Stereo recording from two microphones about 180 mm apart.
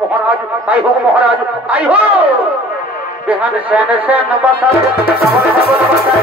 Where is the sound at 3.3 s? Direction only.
10° right (ahead or behind).